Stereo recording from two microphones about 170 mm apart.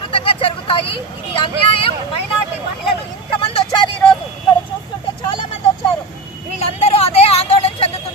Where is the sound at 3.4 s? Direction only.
30° left (ahead or behind).